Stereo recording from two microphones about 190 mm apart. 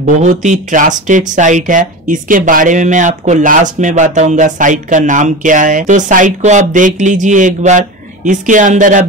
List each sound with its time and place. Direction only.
0.0 s speech: 40° right (ahead or behind)